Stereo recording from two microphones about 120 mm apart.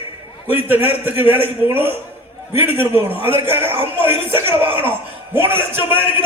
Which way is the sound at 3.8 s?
20° right (ahead or behind).